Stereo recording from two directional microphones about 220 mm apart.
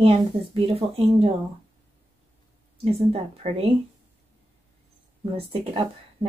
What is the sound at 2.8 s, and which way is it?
Speech, 30° right (ahead or behind).